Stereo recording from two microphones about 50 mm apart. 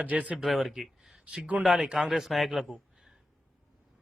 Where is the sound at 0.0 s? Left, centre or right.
Right.